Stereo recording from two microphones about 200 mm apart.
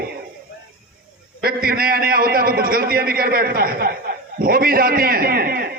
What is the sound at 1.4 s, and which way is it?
A man's voice, 50° right (ahead or behind).